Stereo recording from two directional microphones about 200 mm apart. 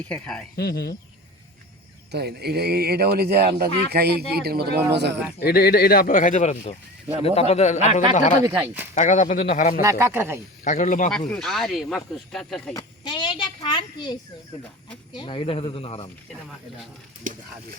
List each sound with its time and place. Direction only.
0.0 s speech: 5° left (ahead or behind)
0.5 s speech: 50° left (ahead or behind)
2.1 s speech: 55° right (ahead or behind)
5.4 s speech: 50° left (ahead or behind); by 8.4 s 35° left (ahead or behind)
8.4 s speech: 10° right (ahead or behind)
9.0 s speech: 35° left (ahead or behind)
9.8 s speech: 10° right (ahead or behind)
10.6 s speech: 40° left (ahead or behind)
11.3 s speech: centre (ahead or behind)
12.7 s a sound: 25° left (ahead or behind)
15.1 s speech: 25° left (ahead or behind)